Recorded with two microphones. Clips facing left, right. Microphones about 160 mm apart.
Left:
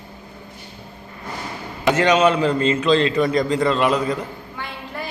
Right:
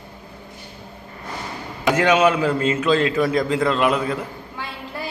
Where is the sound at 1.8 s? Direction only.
10° right (ahead or behind).